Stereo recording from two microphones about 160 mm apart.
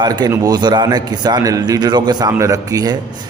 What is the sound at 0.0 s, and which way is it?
A man's voice, 25° right (ahead or behind).